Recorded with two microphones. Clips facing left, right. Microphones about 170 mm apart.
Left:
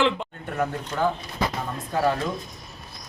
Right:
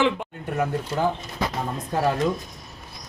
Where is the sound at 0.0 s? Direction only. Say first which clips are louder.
Right 1 dB; 10° right (ahead or behind).